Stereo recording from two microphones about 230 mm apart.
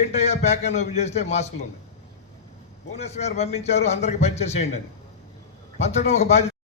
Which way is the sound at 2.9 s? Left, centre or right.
Left.